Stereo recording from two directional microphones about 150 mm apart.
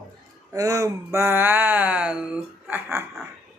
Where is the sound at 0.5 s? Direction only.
20° right (ahead or behind).